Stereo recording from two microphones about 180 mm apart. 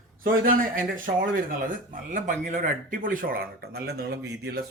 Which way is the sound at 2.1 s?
45° right (ahead or behind).